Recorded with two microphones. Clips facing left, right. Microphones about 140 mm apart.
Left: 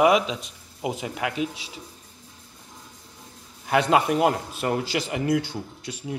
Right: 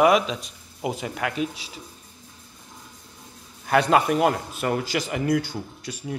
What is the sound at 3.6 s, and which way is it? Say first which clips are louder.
Speech: right 1 dB; 15° left (ahead or behind).